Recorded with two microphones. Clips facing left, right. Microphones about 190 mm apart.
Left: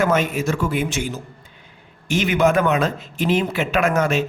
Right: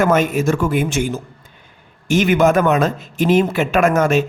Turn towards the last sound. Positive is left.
turn(degrees=-50)  # may be behind; listen again after turning